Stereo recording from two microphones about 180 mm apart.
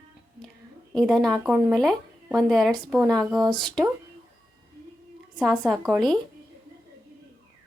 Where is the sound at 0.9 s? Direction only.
Centre (ahead or behind).